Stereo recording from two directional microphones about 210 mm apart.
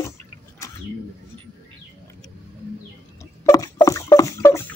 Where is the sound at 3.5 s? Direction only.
15° left (ahead or behind).